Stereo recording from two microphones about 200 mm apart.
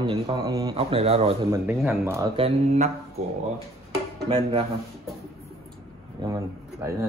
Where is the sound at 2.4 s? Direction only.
30° right (ahead or behind).